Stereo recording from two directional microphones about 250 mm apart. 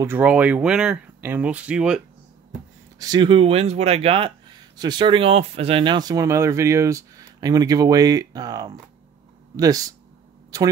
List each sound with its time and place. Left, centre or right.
0.0 s speech: centre
3.0 s speech: centre